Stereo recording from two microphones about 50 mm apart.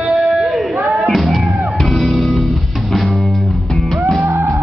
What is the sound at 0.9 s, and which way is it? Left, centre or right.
Music, centre.